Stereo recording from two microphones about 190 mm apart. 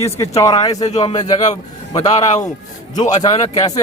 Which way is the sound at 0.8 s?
35° left (ahead or behind).